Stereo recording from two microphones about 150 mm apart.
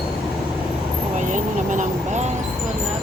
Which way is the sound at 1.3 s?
55° right (ahead or behind).